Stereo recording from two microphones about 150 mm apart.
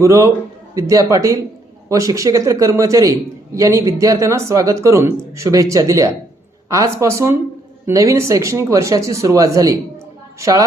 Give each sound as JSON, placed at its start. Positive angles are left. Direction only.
{"t": 0.0, "sound": "a man's voice", "side_deg": -20}